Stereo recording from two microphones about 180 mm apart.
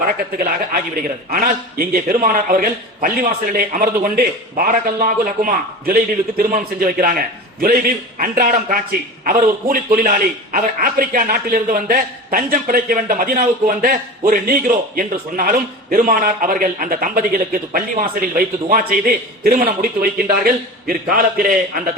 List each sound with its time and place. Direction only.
0.0 s a man's voice: 55° right (ahead or behind)